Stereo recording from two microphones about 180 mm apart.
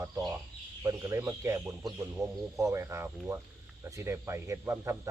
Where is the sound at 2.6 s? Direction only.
15° right (ahead or behind).